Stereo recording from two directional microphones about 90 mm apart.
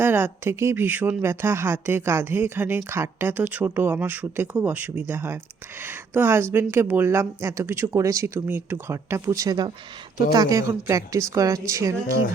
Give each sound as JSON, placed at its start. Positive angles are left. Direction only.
{"t": 0.0, "sound": "a woman's voice", "side_deg": -20}